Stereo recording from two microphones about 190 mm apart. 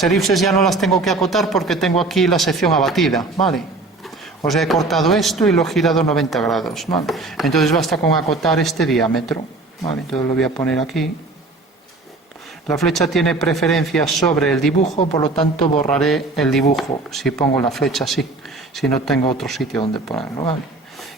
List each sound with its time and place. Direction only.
0.0 s a man's voice: centre (ahead or behind)
4.4 s a man's voice: centre (ahead or behind)
12.6 s a man's voice: centre (ahead or behind)
14.8 s speech: 35° left (ahead or behind)
15.9 s a man's voice: centre (ahead or behind)
19.7 s speech: 25° left (ahead or behind)